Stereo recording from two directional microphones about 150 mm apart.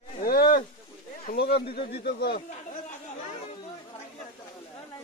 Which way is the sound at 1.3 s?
90° left.